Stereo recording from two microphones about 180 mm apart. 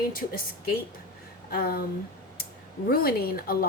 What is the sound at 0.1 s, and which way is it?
A woman's voice, 50° left (ahead or behind).